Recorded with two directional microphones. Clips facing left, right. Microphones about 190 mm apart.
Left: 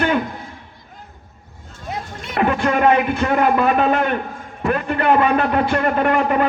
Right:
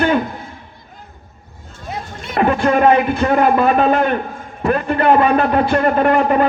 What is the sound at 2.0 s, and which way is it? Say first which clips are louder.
A man's voice: right 3 dB; 35° right (ahead or behind).